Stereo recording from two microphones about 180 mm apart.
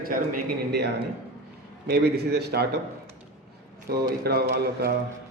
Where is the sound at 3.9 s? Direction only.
60° right (ahead or behind).